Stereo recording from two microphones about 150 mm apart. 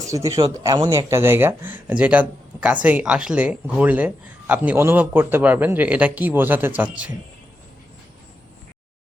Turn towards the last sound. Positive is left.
turn(degrees=-10)  # may be behind; listen again after turning